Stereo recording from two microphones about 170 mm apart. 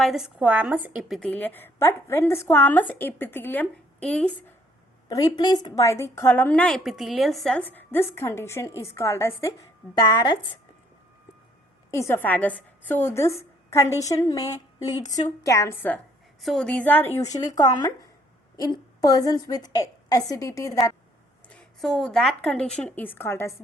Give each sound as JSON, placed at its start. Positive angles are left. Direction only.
{"t": 0.0, "sound": "a woman's voice", "side_deg": 0}
{"t": 5.0, "sound": "a woman's voice", "side_deg": 25}
{"t": 11.9, "sound": "a woman's voice", "side_deg": 15}
{"t": 16.4, "sound": "a woman's voice", "side_deg": 0}
{"t": 21.5, "sound": "a woman's voice", "side_deg": 5}